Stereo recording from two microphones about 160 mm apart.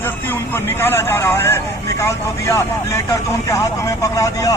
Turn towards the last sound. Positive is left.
turn(degrees=20)  # may be behind; listen again after turning